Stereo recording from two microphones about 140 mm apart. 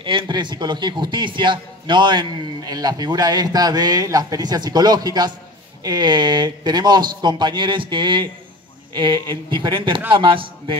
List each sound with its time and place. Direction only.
0.0 s a man's voice: 35° right (ahead or behind)